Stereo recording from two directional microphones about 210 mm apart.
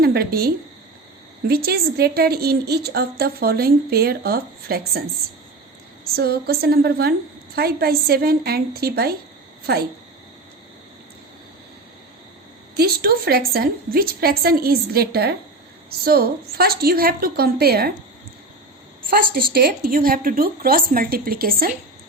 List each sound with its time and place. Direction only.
0.0 s a woman's voice: 45° right (ahead or behind)
6.1 s a woman's voice: 45° right (ahead or behind)
12.7 s a woman's voice: 45° right (ahead or behind)
19.1 s a woman's voice: 45° right (ahead or behind)